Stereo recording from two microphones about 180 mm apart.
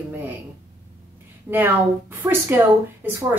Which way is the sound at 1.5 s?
10° right (ahead or behind).